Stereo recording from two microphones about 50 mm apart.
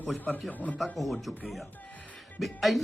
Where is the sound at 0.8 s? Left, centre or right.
Centre.